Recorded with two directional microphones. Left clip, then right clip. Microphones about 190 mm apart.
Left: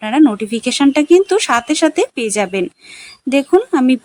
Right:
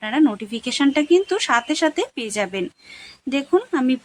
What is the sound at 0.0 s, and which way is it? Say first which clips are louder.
Speech: left 7 dB; 25° left (ahead or behind).